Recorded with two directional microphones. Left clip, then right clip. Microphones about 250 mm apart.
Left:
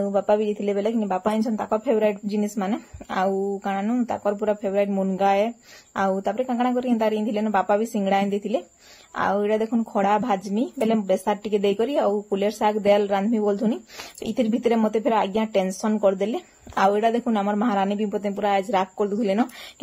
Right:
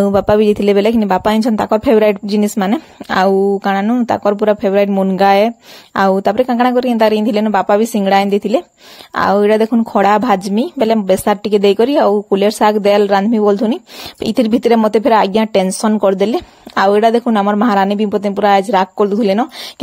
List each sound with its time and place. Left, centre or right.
0.0 s speech: right